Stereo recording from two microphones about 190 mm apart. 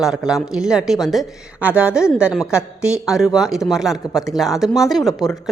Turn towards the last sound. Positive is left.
turn(degrees=0)  # may be behind; listen again after turning